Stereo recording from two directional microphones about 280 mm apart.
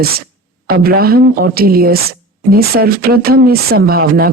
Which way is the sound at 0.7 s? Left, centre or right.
Right.